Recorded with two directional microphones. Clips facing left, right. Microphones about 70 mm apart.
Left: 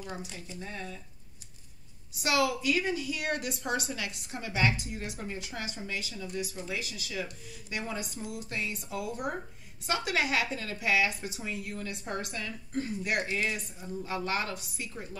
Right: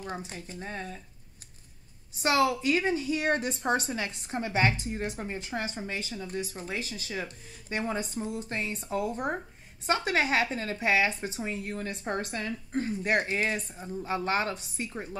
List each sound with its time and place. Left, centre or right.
0.0 s a woman's voice: right
2.1 s a woman's voice: right